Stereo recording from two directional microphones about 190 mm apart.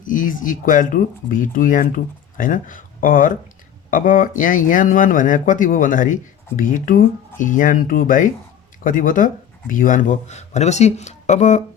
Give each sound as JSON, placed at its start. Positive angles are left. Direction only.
{"t": 0.0, "sound": "speech", "side_deg": 45}